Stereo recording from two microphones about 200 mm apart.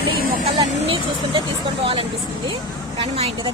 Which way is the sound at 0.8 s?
25° right (ahead or behind).